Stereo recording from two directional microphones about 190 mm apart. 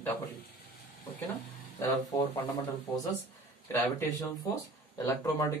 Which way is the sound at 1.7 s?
15° left (ahead or behind).